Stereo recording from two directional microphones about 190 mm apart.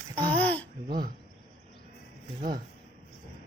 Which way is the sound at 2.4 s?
50° right (ahead or behind).